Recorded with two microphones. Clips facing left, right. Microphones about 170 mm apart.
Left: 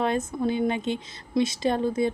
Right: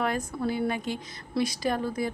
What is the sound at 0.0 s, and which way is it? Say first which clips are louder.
Speech: left 3 dB; 25° left (ahead or behind).